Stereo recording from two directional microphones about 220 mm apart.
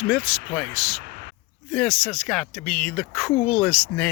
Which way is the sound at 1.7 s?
5° left (ahead or behind).